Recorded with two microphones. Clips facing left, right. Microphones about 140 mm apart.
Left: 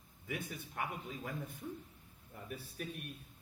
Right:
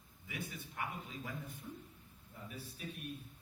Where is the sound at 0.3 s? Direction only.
50° left (ahead or behind).